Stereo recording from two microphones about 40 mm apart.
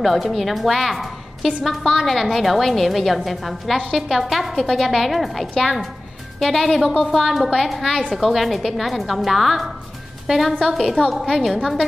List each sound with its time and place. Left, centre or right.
0.0 s a woman's voice: centre